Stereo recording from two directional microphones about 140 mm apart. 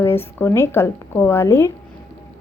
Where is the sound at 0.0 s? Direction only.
15° left (ahead or behind).